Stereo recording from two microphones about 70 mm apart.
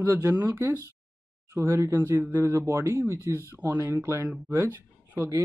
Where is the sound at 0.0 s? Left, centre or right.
Right.